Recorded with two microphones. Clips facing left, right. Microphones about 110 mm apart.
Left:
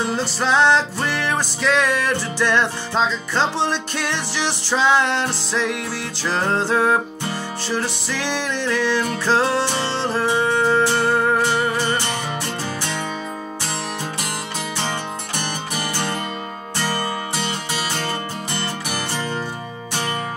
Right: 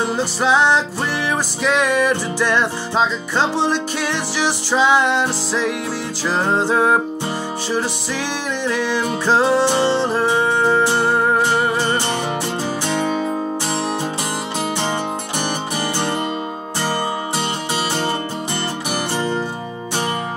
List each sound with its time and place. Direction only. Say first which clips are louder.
0.0 s music: right 3 dB; 10° right (ahead or behind)
18.9 s music: right 7 dB; 20° right (ahead or behind)